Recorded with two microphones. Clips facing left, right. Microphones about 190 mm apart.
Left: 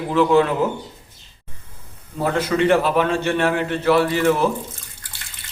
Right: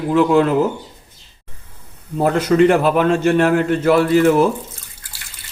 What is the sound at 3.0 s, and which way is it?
Speech, 45° right (ahead or behind).